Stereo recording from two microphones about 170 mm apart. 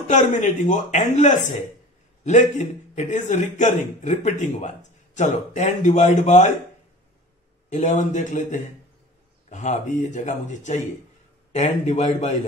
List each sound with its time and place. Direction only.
0.1 s a man's voice: 45° left (ahead or behind)
7.7 s a man's voice: 45° left (ahead or behind)